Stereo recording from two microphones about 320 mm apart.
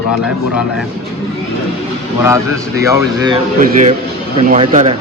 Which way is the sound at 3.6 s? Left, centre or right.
Right.